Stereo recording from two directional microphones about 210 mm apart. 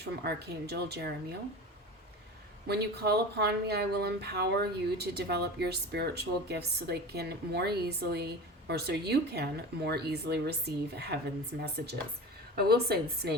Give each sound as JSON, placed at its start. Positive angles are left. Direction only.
{"t": 0.2, "sound": "speech", "side_deg": -50}
{"t": 2.6, "sound": "speech", "side_deg": -50}